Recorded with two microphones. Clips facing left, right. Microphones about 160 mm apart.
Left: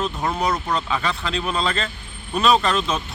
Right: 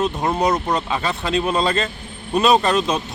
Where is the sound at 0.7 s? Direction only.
40° right (ahead or behind).